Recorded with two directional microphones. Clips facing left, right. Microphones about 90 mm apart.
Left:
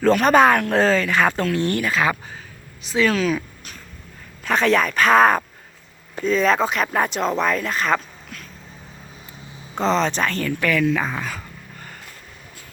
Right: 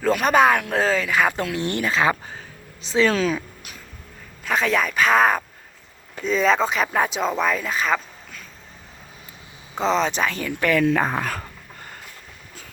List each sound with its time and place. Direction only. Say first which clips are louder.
0.0 s speech: left 3 dB; 5° right (ahead or behind); by 3.4 s 30° right (ahead or behind)
4.4 s speech: left 3 dB; centre (ahead or behind)
9.7 s speech: left 1 dB; centre (ahead or behind)
10.6 s speech: right 2 dB; 30° right (ahead or behind); by 11.4 s 55° right (ahead or behind)